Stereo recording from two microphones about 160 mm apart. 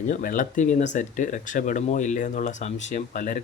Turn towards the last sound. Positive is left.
turn(degrees=55)  # may be behind; listen again after turning